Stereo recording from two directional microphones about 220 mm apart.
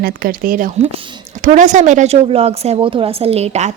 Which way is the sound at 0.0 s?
40° right (ahead or behind).